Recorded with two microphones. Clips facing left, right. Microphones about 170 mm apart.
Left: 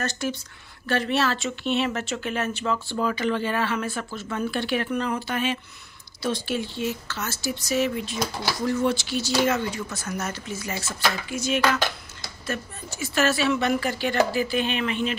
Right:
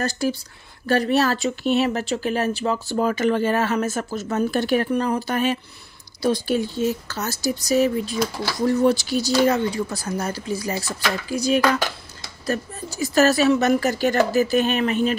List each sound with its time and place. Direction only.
0.0 s a woman's voice: 35° right (ahead or behind)